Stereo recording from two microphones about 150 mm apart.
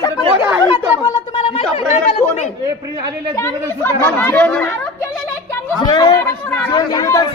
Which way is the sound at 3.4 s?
15° left (ahead or behind).